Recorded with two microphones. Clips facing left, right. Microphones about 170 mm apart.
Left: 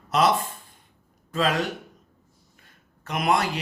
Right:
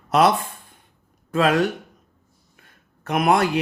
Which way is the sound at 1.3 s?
55° right (ahead or behind).